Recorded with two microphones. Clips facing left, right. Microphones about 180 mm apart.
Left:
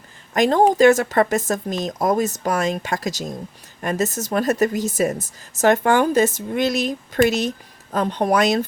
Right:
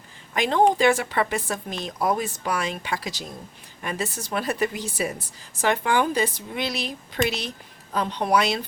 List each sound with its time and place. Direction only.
0.3 s speech: 45° left (ahead or behind)